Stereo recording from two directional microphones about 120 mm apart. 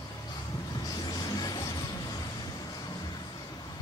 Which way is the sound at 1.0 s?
35° left (ahead or behind).